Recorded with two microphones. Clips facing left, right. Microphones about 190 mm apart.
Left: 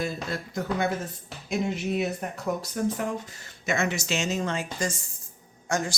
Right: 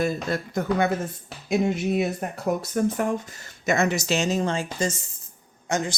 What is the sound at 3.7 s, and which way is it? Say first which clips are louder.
Speech: right 5 dB; 40° right (ahead or behind).